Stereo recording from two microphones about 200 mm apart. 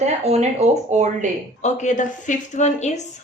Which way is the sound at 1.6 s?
35° left (ahead or behind).